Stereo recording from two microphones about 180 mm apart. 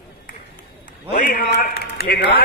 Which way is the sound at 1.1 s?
50° left (ahead or behind).